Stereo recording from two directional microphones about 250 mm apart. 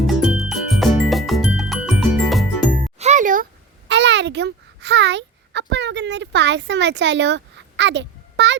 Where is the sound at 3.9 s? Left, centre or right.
Right.